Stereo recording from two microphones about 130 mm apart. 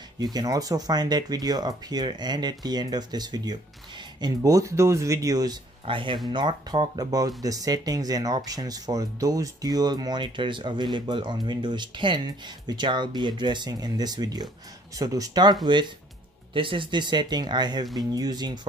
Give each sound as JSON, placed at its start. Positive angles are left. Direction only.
{"t": 0.2, "sound": "speech", "side_deg": -30}